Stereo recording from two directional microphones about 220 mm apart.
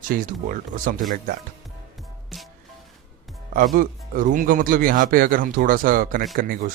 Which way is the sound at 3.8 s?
35° right (ahead or behind).